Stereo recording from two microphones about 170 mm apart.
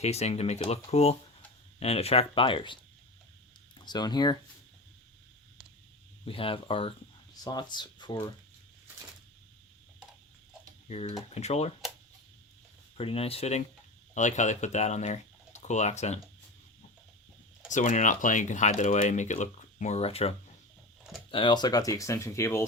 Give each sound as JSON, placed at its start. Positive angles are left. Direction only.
{"t": 0.0, "sound": "speech", "side_deg": 40}
{"t": 3.8, "sound": "speech", "side_deg": 25}
{"t": 6.2, "sound": "speech", "side_deg": 30}
{"t": 10.8, "sound": "speech", "side_deg": 40}
{"t": 13.0, "sound": "speech", "side_deg": 35}
{"t": 17.7, "sound": "speech", "side_deg": 45}